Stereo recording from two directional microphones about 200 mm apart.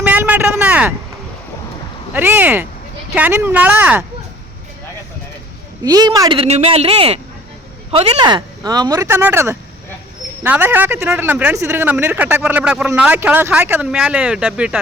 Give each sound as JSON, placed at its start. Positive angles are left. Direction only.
{"t": 0.0, "sound": "a sound", "side_deg": -10}
{"t": 2.1, "sound": "speech", "side_deg": -10}
{"t": 5.8, "sound": "speech", "side_deg": -20}